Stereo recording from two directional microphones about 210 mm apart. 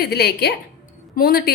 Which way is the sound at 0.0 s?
50° left (ahead or behind).